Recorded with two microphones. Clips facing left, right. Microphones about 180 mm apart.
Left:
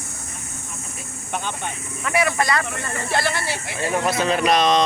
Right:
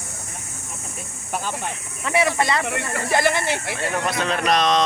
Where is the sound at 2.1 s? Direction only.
25° right (ahead or behind).